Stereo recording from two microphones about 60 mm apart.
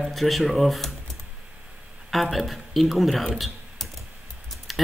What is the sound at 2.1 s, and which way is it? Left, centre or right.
Speech, centre.